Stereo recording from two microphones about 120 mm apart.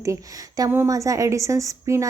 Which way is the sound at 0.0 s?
25° right (ahead or behind).